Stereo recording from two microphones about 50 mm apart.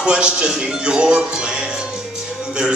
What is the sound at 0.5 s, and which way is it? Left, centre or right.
Speech, centre.